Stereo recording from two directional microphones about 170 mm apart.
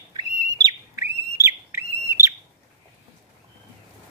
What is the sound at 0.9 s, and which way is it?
Bird, 15° right (ahead or behind).